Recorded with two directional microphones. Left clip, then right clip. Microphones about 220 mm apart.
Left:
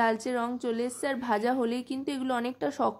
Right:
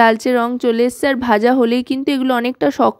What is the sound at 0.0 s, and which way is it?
A woman's voice, 40° right (ahead or behind).